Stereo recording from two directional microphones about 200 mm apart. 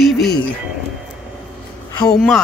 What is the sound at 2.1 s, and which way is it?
Speech, centre (ahead or behind).